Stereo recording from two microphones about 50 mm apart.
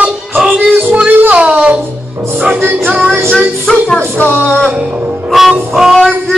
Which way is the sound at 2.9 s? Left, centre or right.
Right.